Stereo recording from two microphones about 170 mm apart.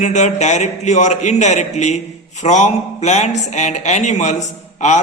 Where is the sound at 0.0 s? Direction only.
45° left (ahead or behind).